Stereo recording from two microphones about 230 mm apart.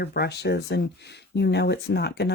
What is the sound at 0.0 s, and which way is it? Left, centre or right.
Speech, left.